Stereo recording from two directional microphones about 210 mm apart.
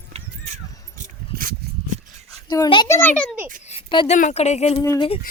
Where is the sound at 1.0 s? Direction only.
40° right (ahead or behind).